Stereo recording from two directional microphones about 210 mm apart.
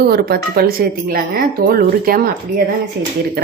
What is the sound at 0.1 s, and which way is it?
Speech, 50° right (ahead or behind).